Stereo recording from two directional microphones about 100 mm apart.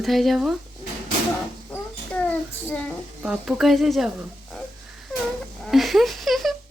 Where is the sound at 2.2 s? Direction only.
15° left (ahead or behind).